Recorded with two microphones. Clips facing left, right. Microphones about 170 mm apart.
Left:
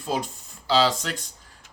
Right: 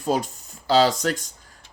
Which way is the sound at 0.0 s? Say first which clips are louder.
Right 4 dB; 45° right (ahead or behind).